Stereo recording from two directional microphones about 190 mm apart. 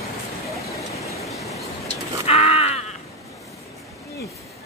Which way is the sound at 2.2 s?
30° left (ahead or behind).